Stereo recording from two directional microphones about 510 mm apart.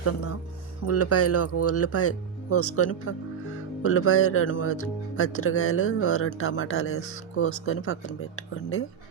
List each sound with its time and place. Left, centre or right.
0.9 s speech: left